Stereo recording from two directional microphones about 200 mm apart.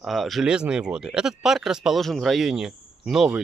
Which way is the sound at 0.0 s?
Centre (ahead or behind).